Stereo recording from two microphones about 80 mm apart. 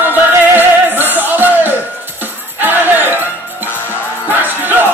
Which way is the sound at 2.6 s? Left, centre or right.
Right.